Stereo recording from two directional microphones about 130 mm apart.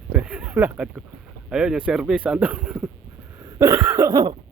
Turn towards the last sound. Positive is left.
turn(degrees=-35)  # may be behind; listen again after turning